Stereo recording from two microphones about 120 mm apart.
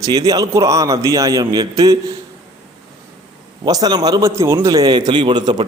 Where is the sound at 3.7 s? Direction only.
30° right (ahead or behind).